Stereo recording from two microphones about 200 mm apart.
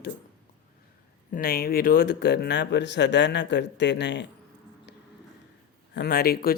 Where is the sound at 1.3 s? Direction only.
50° left (ahead or behind).